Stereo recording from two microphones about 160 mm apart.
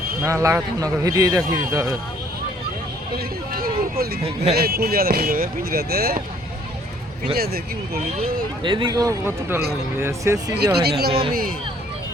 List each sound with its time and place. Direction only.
0.2 s a man's voice: 20° right (ahead or behind)
3.5 s speech: 70° right (ahead or behind)
7.3 s speech: 75° right (ahead or behind)
8.2 s a man's voice: 30° right (ahead or behind); by 10.3 s 15° right (ahead or behind)
10.6 s speech: 90° right
11.1 s a man's voice: 35° right (ahead or behind)